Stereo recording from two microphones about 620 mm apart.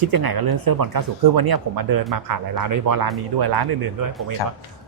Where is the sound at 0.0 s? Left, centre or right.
Right.